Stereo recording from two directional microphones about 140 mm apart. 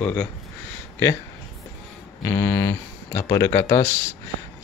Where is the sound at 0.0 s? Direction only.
10° left (ahead or behind).